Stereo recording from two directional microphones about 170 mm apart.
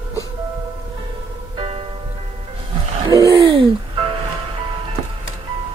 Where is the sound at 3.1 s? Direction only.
20° right (ahead or behind).